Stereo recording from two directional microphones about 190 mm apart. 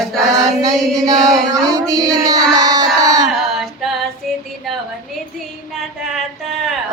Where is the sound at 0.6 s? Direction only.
20° right (ahead or behind).